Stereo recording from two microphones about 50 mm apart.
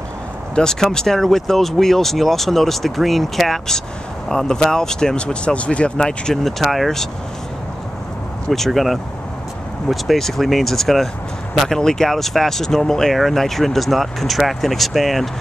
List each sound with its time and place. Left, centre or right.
0.6 s speech: centre
6.4 s speech: centre
8.5 s speech: centre